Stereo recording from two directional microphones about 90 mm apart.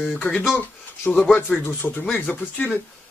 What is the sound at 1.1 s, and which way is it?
Speech, 10° left (ahead or behind).